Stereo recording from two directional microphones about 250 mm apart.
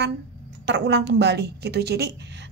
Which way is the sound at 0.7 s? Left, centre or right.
Right.